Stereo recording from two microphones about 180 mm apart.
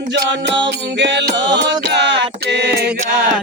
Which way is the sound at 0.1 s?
75° right (ahead or behind).